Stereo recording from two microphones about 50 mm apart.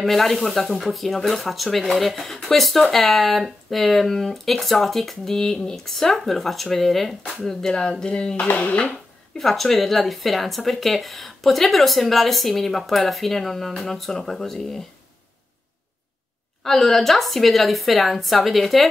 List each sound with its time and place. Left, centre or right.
0.0 s speech: centre
7.4 s speech: centre
9.4 s speech: centre
16.6 s speech: centre